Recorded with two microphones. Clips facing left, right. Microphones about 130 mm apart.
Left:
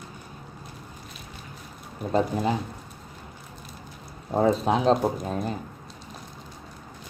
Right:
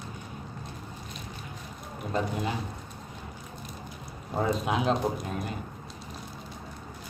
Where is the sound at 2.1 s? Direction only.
35° left (ahead or behind).